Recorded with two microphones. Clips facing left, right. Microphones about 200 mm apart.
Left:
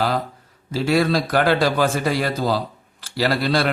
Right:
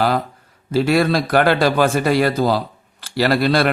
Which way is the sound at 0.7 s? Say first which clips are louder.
Right 3 dB; 60° right (ahead or behind).